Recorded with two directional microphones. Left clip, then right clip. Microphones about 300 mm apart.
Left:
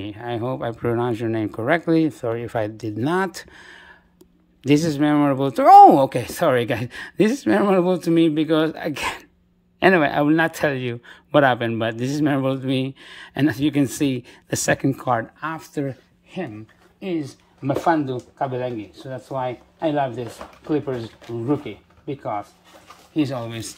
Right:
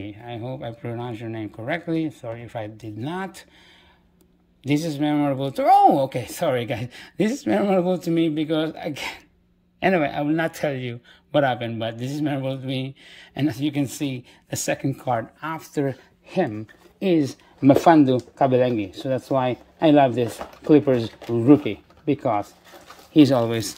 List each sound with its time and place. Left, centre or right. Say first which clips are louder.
0.0 s a man's voice: left 7 dB; centre
16.3 s speech: right 7 dB; centre
21.6 s speech: right 7 dB; right
22.2 s speech: right 4 dB; right